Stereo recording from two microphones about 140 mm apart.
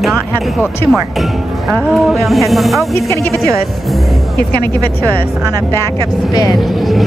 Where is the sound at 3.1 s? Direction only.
20° left (ahead or behind).